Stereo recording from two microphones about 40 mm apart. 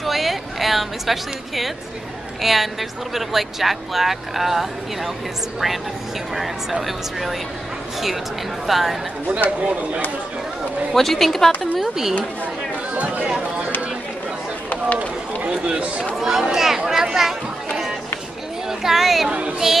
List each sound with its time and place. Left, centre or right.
0.0 s a woman's voice: centre
6.3 s speech: centre
8.6 s speech: centre
9.6 s speech: right
11.0 s speech: centre
11.8 s speech: centre
12.9 s chatter: right
15.0 s run: right
16.2 s speech: centre